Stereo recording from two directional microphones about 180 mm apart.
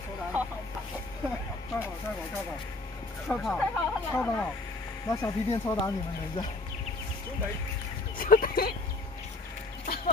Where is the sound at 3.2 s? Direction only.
5° left (ahead or behind).